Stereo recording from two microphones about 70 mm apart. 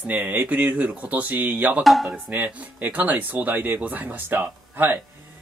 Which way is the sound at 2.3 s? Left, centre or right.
Right.